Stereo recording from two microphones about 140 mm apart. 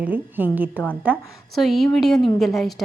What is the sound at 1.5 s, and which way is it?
A woman's voice, centre (ahead or behind).